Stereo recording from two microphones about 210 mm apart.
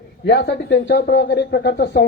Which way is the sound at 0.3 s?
55° left (ahead or behind).